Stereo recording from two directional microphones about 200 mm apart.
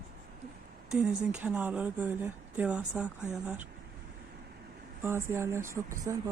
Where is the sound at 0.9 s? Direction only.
5° right (ahead or behind).